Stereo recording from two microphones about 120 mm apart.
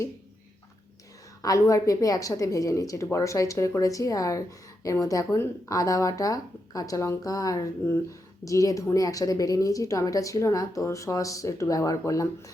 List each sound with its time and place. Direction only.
1.4 s a woman's voice: 30° left (ahead or behind)